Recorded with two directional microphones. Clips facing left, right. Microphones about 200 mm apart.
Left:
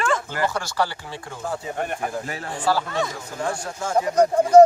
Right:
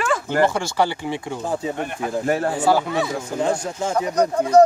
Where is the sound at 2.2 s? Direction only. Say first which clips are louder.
Right 12 dB; 50° right (ahead or behind).